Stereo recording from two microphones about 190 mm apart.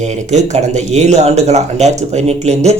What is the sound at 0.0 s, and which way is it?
Speech, 35° right (ahead or behind).